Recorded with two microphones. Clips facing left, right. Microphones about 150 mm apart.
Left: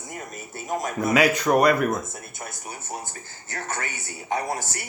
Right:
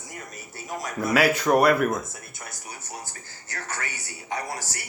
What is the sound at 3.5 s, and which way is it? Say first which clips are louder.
Speech: left 3 dB; 25° left (ahead or behind).